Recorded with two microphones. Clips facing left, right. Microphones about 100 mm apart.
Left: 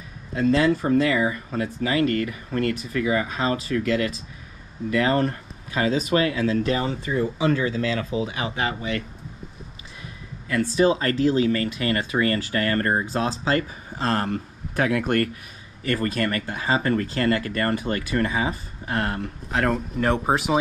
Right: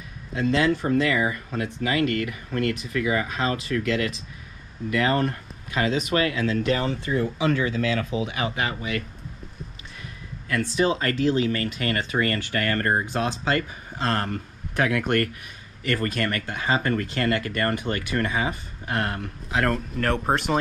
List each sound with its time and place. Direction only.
0.4 s speech: 40° left (ahead or behind)
6.8 s speech: 10° left (ahead or behind)
7.3 s speech: 30° left (ahead or behind)
10.5 s speech: 35° left (ahead or behind)
19.5 s speech: centre (ahead or behind)